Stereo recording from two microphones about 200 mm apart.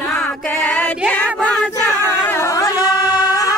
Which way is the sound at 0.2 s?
10° left (ahead or behind).